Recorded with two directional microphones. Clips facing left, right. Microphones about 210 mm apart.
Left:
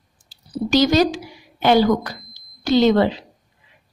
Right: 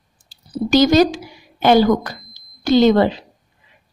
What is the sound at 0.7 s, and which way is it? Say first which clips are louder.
A woman's voice: right 3 dB; 50° right (ahead or behind).